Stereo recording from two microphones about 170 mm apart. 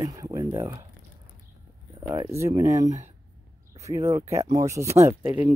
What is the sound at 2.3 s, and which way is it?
Speech, 15° right (ahead or behind).